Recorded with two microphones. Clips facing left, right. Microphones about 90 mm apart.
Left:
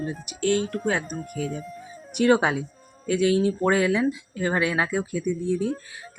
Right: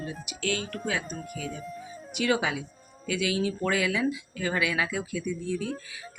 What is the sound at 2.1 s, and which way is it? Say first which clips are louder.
Speech: left 7 dB; 45° left (ahead or behind).